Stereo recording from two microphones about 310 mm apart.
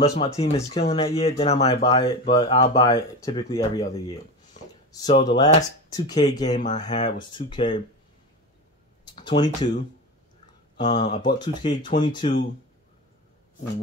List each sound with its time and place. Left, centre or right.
0.1 s speech: centre
9.0 s speech: centre